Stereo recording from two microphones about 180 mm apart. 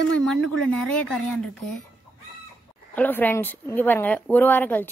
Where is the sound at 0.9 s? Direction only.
5° left (ahead or behind).